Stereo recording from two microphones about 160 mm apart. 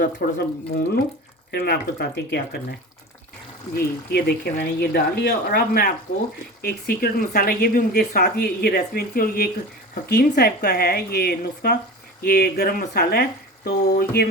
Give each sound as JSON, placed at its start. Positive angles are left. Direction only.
{"t": 0.0, "sound": "speech", "side_deg": 75}
{"t": 3.8, "sound": "speech", "side_deg": 75}
{"t": 10.1, "sound": "speech", "side_deg": 90}